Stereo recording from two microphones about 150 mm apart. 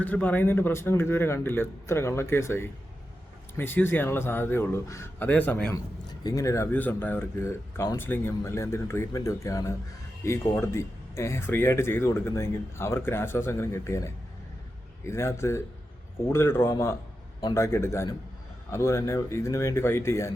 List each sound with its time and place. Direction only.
0.0 s speech: 10° left (ahead or behind)
5.7 s speech: 25° left (ahead or behind)